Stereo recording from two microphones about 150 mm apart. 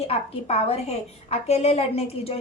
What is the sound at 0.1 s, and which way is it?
A woman's voice, 45° left (ahead or behind).